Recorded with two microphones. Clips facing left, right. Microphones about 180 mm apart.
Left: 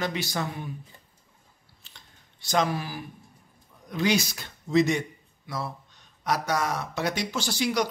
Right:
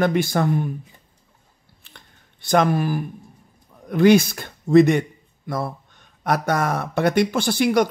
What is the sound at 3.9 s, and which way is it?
A man's voice, 55° right (ahead or behind).